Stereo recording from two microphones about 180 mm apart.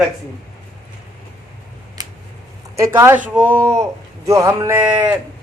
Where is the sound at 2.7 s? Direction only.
15° right (ahead or behind).